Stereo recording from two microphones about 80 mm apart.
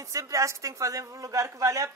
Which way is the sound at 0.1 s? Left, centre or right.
Right.